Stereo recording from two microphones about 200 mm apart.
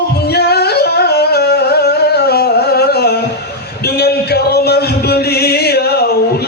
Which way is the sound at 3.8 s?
55° left (ahead or behind).